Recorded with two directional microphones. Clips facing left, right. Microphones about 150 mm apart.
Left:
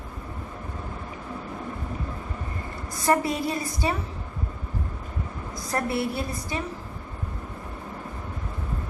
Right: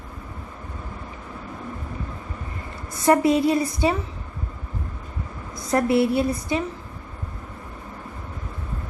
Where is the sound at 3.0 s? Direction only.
25° right (ahead or behind).